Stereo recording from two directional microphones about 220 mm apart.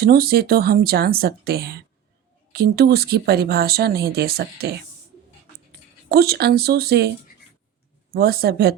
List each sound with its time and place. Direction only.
0.0 s speech: 45° right (ahead or behind)
6.1 s speech: 45° right (ahead or behind)
8.1 s speech: 45° right (ahead or behind)